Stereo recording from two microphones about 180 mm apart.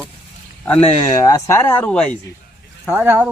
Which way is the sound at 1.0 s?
15° left (ahead or behind).